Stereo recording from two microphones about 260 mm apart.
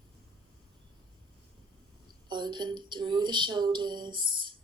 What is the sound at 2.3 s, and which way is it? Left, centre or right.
A woman's voice, centre.